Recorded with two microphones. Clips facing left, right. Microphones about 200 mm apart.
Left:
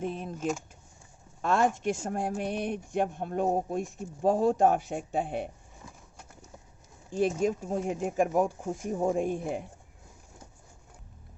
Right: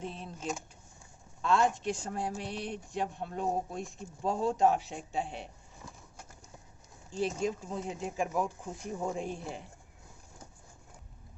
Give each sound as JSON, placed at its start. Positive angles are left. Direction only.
{"t": 0.0, "sound": "speech", "side_deg": 55}
{"t": 7.2, "sound": "speech", "side_deg": 50}